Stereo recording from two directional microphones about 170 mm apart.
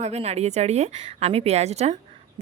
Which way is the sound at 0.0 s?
40° right (ahead or behind).